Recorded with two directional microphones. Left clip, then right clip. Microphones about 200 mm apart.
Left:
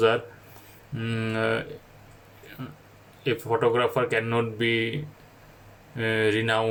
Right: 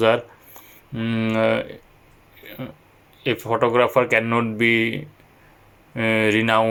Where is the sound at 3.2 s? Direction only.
10° right (ahead or behind).